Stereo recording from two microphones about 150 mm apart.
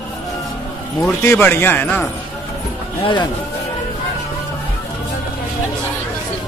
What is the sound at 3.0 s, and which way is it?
Speech, 30° left (ahead or behind).